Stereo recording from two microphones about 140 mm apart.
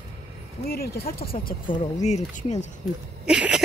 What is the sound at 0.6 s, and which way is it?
Speech, 90° left.